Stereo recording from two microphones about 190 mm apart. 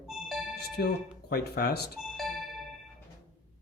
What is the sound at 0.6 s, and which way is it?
Speech, 55° left (ahead or behind).